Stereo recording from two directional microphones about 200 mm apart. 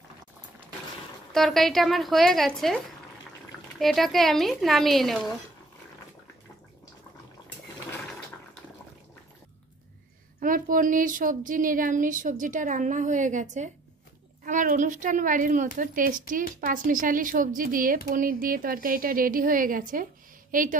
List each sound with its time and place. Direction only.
1.3 s speech: centre (ahead or behind)
10.4 s a woman's voice: 40° right (ahead or behind)